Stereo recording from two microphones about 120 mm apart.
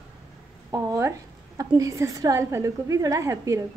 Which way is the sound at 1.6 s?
30° right (ahead or behind).